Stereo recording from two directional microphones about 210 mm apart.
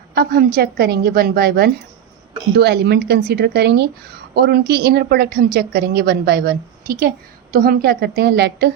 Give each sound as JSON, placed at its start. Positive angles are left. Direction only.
{"t": 0.1, "sound": "a woman's voice", "side_deg": -45}